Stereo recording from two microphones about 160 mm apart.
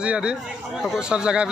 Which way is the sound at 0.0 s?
5° right (ahead or behind).